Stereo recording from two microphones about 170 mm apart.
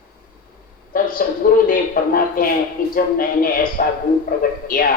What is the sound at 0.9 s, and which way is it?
A woman's voice, 55° left (ahead or behind).